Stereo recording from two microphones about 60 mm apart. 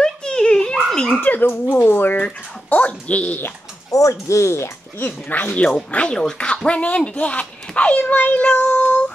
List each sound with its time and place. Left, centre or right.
0.0 s a sound: centre
1.2 s speech: left
2.2 s speech: left
3.9 s speech: left
5.0 s speech: left